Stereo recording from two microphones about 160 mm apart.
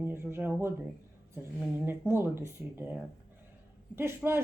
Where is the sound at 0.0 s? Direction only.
15° right (ahead or behind).